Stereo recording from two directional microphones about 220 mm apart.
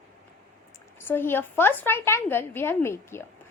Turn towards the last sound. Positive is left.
turn(degrees=10)  # may be behind; listen again after turning